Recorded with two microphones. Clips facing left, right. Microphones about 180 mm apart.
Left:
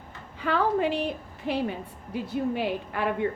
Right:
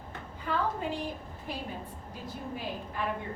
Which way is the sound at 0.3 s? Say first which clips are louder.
Left 8 dB; 80° left.